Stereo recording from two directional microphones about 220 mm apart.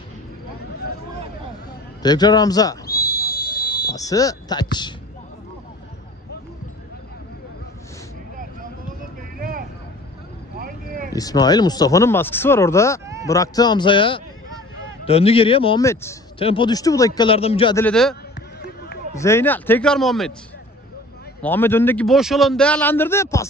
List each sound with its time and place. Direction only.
2.0 s a man's voice: 20° left (ahead or behind)
2.9 s whistle: 45° left (ahead or behind)
3.9 s a man's voice: 15° left (ahead or behind)
9.4 s vehicle: 40° right (ahead or behind)
10.6 s a sound: 40° right (ahead or behind)
11.1 s a man's voice: 15° left (ahead or behind)
13.0 s a sound: 15° right (ahead or behind)
13.3 s speech: 15° left (ahead or behind)
15.8 s a man's voice: 15° left (ahead or behind)
16.3 s speech: 25° left (ahead or behind)
17.7 s a man's voice: 5° left (ahead or behind)
19.1 s a man's voice: 10° left (ahead or behind)
21.4 s a man's voice: 10° left (ahead or behind)